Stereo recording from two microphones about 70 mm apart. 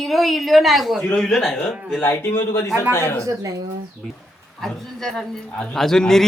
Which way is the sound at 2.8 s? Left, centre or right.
Left.